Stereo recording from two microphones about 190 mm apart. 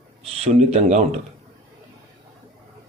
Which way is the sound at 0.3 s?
35° right (ahead or behind).